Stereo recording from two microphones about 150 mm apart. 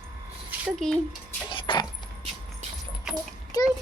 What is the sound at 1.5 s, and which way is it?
Keys jangling, 35° left (ahead or behind).